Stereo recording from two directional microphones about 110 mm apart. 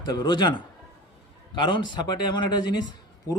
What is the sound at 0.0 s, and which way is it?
Speech, 40° left (ahead or behind).